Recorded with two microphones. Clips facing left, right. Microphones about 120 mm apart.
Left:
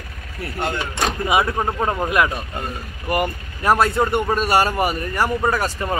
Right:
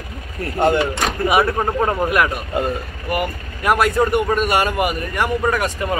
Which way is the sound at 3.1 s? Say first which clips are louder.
Left 1 dB; 35° left (ahead or behind).